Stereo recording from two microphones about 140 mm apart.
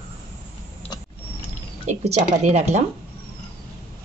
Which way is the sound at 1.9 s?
55° right (ahead or behind).